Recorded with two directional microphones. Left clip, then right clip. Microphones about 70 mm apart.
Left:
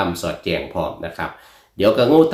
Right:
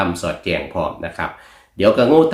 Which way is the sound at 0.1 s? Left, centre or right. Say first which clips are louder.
Right 1 dB; right.